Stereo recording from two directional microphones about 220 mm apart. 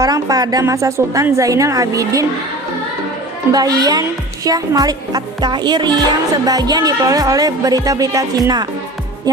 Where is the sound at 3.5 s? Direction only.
15° right (ahead or behind).